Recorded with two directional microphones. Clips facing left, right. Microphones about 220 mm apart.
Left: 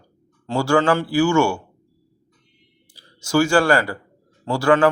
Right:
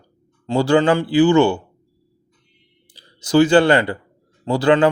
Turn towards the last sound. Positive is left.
turn(degrees=-20)  # may be behind; listen again after turning